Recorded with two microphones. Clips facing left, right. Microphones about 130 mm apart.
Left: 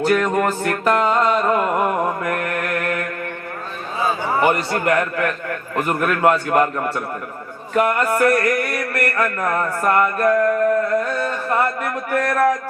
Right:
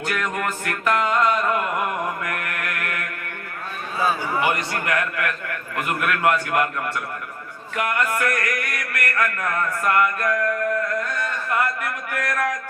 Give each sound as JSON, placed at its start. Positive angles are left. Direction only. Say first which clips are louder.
{"t": 0.0, "sound": "music", "louder": "left 8 dB", "side_deg": 30}
{"t": 4.4, "sound": "a man's voice", "louder": "left 5 dB", "side_deg": 40}
{"t": 7.7, "sound": "mantra", "louder": "left 6 dB", "side_deg": 35}